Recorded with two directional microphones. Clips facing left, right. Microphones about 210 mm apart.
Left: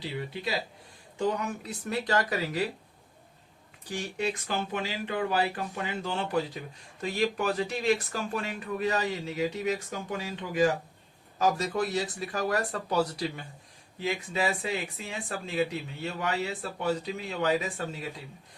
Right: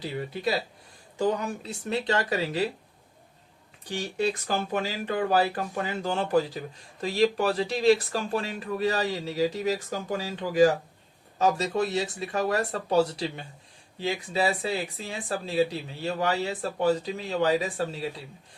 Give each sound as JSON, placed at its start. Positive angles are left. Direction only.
{"t": 1.2, "sound": "speech", "side_deg": -30}
{"t": 3.8, "sound": "speech", "side_deg": -35}
{"t": 11.3, "sound": "speech", "side_deg": -25}